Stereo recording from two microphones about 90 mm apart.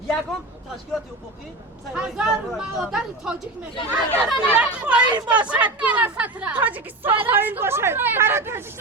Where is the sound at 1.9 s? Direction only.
5° right (ahead or behind).